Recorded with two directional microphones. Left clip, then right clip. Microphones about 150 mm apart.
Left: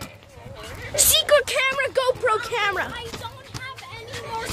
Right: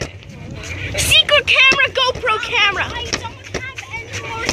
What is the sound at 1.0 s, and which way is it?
Vehicle, 15° left (ahead or behind).